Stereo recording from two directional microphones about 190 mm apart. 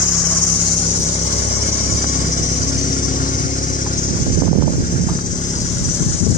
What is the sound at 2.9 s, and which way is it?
Vehicle, 45° left (ahead or behind).